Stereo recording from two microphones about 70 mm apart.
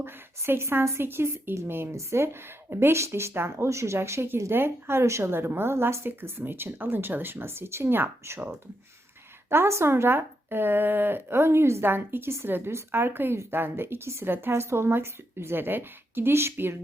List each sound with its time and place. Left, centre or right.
0.0 s speech: right
9.5 s speech: right